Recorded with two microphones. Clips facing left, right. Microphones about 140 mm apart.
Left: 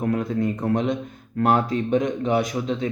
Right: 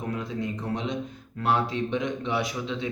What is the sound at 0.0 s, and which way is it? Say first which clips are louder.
A man's voice: left 8 dB; 55° left (ahead or behind).